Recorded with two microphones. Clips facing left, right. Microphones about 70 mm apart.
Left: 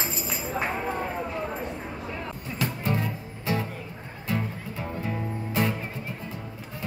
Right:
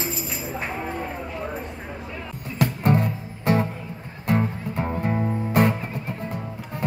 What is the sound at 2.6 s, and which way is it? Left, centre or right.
Music, right.